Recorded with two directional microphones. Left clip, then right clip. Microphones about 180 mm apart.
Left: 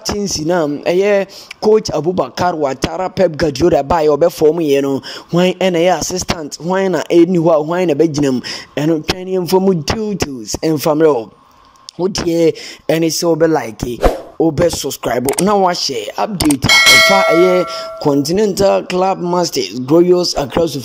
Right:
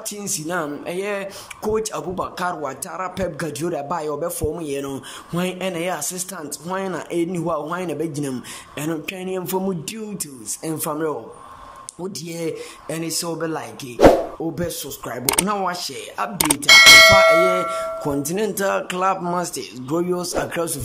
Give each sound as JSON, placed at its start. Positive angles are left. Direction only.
{"t": 0.1, "sound": "speech", "side_deg": 30}
{"t": 16.4, "sound": "speech", "side_deg": 0}
{"t": 18.0, "sound": "speech", "side_deg": 25}